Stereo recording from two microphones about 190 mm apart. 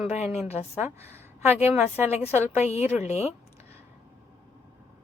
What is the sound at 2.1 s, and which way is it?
A woman's voice, 35° left (ahead or behind).